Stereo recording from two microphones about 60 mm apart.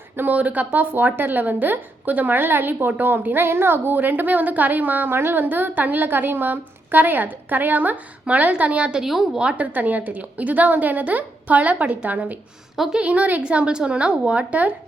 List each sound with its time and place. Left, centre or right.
0.2 s speech: right; by 9.4 s centre
9.4 s a woman's voice: centre
9.7 s a woman's voice: right
12.7 s a woman's voice: centre
13.0 s a woman's voice: right